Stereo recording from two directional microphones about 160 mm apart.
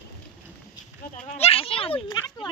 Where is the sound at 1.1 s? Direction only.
45° left (ahead or behind).